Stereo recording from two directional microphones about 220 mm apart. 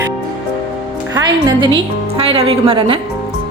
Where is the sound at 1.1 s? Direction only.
20° right (ahead or behind).